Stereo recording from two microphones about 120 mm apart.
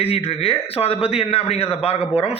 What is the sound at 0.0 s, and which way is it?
A man's voice, 55° left (ahead or behind).